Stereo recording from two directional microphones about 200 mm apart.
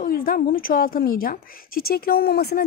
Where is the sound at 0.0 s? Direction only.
45° left (ahead or behind).